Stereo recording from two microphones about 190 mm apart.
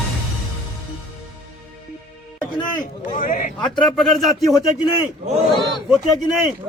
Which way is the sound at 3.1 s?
45° left (ahead or behind).